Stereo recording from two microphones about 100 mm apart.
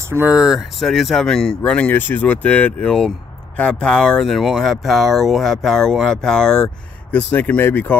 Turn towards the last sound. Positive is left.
turn(degrees=20)  # may be behind; listen again after turning